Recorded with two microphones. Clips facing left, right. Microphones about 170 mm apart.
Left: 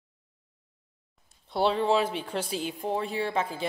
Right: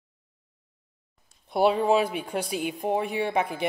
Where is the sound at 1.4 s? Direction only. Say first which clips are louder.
Right 3 dB; 15° right (ahead or behind).